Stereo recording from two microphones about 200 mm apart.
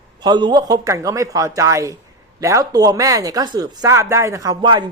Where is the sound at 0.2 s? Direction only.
20° right (ahead or behind).